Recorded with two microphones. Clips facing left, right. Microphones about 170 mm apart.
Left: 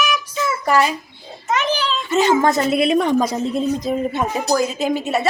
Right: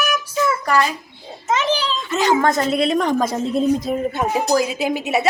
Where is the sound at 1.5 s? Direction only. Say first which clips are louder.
Right 1 dB; 30° right (ahead or behind).